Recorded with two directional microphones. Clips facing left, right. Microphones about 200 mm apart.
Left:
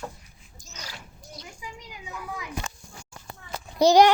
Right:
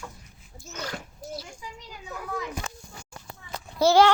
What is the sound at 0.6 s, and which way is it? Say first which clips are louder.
Speech: right 9 dB; 60° right (ahead or behind).